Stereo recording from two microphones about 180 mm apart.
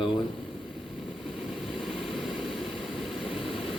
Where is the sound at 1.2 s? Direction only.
Centre (ahead or behind).